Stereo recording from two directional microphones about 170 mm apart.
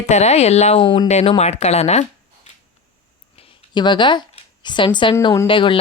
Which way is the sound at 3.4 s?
30° left (ahead or behind).